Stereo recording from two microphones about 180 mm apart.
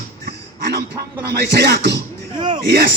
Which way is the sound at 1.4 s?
65° right (ahead or behind).